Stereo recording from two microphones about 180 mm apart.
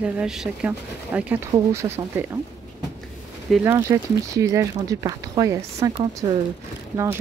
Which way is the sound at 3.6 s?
15° right (ahead or behind).